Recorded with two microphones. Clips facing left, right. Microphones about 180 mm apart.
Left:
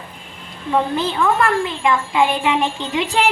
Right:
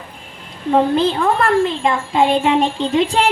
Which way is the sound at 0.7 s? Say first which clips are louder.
Right 5 dB; 30° right (ahead or behind).